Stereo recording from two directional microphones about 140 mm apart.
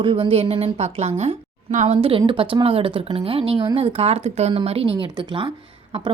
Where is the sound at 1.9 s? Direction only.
40° right (ahead or behind).